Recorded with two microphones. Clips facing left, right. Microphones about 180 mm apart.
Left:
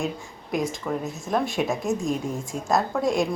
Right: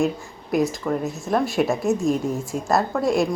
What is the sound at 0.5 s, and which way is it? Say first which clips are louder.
A woman's voice: right 5 dB; 5° right (ahead or behind).